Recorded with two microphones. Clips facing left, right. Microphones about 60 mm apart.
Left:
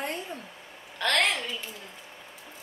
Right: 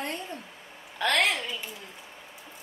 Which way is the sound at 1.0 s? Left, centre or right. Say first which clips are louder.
Right 1 dB; centre.